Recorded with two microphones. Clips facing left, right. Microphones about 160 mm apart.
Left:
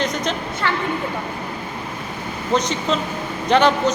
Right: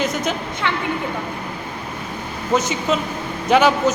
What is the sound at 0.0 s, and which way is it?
Speech, 5° right (ahead or behind).